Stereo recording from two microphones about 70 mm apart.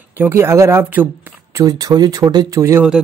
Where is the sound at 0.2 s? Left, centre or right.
Right.